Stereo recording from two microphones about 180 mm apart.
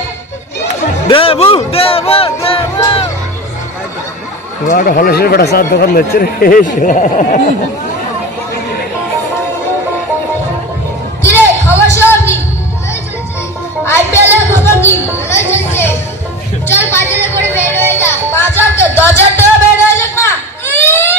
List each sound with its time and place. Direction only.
1.0 s speech: 30° left (ahead or behind)
4.6 s speech: 50° left (ahead or behind)
11.2 s music: 10° left (ahead or behind)
11.9 s a sound: 15° left (ahead or behind)
13.8 s music: 15° left (ahead or behind)
15.5 s a sound: 15° left (ahead or behind)
17.4 s music: 10° left (ahead or behind)